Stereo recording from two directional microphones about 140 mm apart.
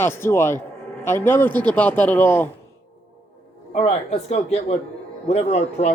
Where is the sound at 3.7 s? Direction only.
50° left (ahead or behind).